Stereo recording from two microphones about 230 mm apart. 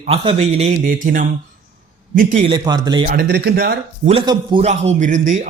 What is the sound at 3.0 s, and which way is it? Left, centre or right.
Speech, right.